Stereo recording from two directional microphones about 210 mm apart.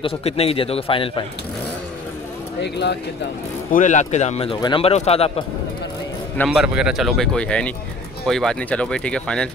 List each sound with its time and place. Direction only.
0.0 s a man's voice: 30° left (ahead or behind)
2.6 s speech: 55° left (ahead or behind)
3.7 s a man's voice: 35° left (ahead or behind)
6.3 s speech: centre (ahead or behind)